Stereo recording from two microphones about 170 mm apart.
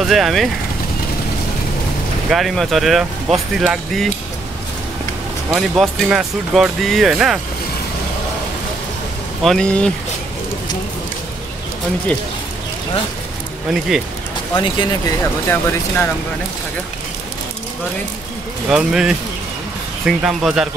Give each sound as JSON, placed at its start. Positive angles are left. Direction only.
{"t": 0.0, "sound": "speech", "side_deg": 0}
{"t": 2.3, "sound": "speech", "side_deg": 0}
{"t": 5.5, "sound": "speech", "side_deg": 0}
{"t": 9.4, "sound": "speech", "side_deg": 5}
{"t": 13.7, "sound": "speech", "side_deg": 0}
{"t": 14.6, "sound": "speech", "side_deg": 25}
{"t": 18.7, "sound": "speech", "side_deg": -5}